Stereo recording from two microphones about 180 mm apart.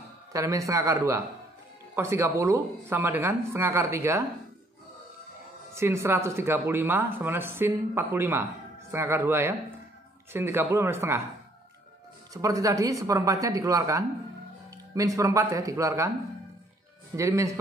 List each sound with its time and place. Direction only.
0.3 s speech: 20° right (ahead or behind)
5.8 s speech: 15° right (ahead or behind)
12.4 s speech: 20° right (ahead or behind)
17.1 s speech: 15° right (ahead or behind)